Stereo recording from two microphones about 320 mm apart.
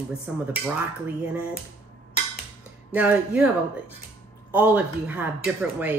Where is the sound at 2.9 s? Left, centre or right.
Centre.